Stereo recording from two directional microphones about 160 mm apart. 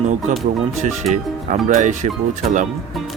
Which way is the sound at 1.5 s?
50° right (ahead or behind).